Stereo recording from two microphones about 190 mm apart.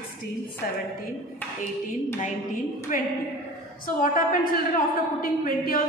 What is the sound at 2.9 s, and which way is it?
A woman's voice, 45° left (ahead or behind).